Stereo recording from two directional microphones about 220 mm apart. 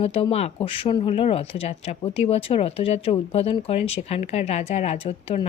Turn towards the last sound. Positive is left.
turn(degrees=25)  # may be behind; listen again after turning